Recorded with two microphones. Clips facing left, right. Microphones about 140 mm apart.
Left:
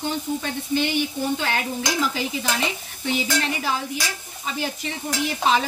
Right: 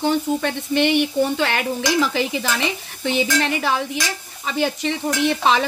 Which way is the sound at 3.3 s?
75° right (ahead or behind).